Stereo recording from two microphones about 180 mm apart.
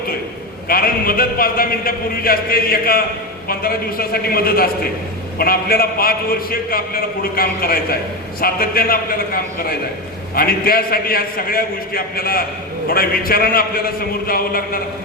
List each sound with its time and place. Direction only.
0.7 s a man's voice: 55° left (ahead or behind)